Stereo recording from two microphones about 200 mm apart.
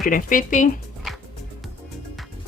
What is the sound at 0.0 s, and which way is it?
Speech, 45° left (ahead or behind).